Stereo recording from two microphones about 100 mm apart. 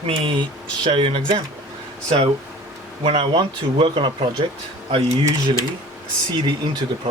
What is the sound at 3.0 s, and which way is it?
Speech, 60° right (ahead or behind).